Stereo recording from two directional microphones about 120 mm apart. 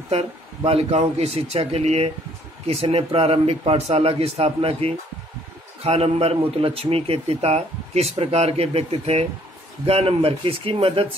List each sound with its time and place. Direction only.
0.1 s a man's voice: 55° right (ahead or behind)